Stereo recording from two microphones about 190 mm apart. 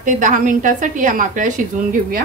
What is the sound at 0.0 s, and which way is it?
A woman's voice, 45° right (ahead or behind).